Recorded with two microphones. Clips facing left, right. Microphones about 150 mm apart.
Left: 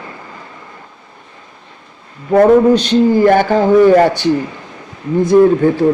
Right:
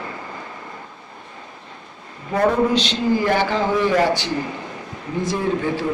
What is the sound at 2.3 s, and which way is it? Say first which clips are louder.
A man's voice: left 10 dB; 50° left (ahead or behind).